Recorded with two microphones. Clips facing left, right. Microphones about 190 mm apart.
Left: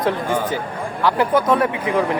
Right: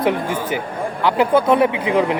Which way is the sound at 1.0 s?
15° right (ahead or behind).